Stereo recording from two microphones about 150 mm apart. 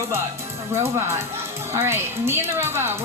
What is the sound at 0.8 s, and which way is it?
Speech, 15° right (ahead or behind).